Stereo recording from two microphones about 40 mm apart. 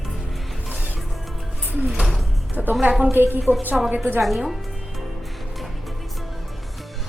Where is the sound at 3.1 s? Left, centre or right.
Right.